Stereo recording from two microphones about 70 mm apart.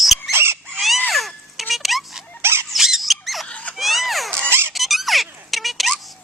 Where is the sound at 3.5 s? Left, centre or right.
Centre.